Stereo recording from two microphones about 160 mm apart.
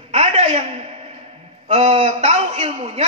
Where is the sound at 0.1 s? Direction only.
40° right (ahead or behind).